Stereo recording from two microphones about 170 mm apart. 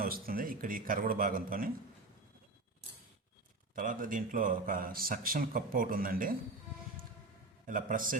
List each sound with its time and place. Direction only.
0.0 s a man's voice: 60° right (ahead or behind)
3.8 s a man's voice: 50° right (ahead or behind)
7.7 s a man's voice: 55° right (ahead or behind)